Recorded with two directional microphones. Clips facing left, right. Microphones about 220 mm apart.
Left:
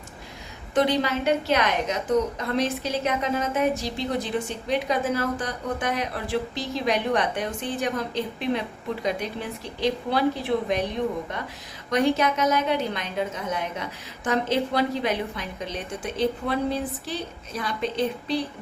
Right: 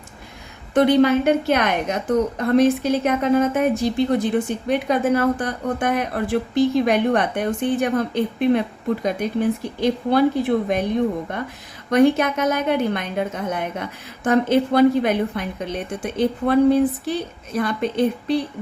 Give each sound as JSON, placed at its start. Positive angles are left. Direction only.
{"t": 0.7, "sound": "a woman's voice", "side_deg": -55}
{"t": 11.9, "sound": "a woman's voice", "side_deg": -55}